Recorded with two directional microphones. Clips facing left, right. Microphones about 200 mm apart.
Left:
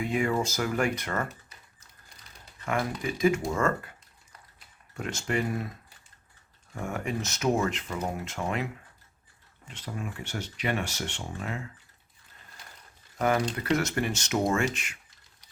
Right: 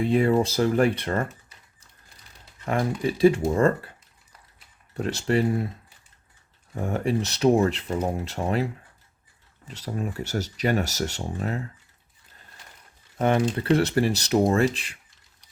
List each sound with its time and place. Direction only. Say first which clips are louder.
0.0 s speech: right 7 dB; 35° right (ahead or behind)
2.6 s speech: right 5 dB; 35° right (ahead or behind)
4.9 s speech: right 7 dB; 35° right (ahead or behind)
6.7 s speech: right 7 dB; 35° right (ahead or behind)
13.1 s speech: right 4 dB; 25° right (ahead or behind)